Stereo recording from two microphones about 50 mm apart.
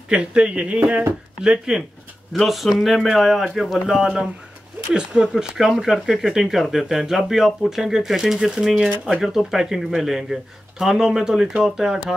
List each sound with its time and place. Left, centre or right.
0.1 s speech: centre
1.4 s speech: centre
2.3 s speech: centre